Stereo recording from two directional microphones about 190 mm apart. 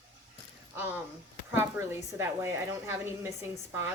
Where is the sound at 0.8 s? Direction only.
10° right (ahead or behind).